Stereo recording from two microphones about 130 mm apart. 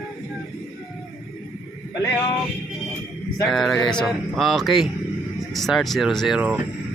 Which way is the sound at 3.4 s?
Centre (ahead or behind).